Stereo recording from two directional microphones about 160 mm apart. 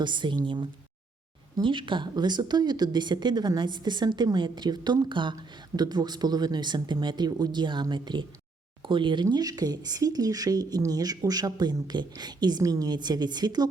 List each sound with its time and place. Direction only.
0.0 s speech: 30° right (ahead or behind)